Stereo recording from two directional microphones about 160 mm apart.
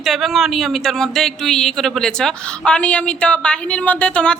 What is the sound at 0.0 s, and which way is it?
Speech, centre (ahead or behind).